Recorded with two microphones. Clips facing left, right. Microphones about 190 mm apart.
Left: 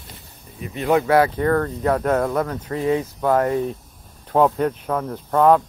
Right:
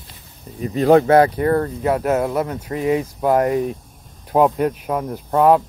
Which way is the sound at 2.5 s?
20° right (ahead or behind).